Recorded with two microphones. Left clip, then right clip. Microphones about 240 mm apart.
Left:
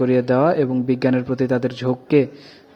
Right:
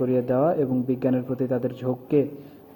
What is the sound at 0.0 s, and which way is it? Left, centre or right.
A man's voice, left.